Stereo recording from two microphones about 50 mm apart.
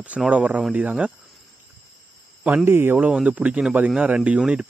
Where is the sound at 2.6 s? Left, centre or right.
Right.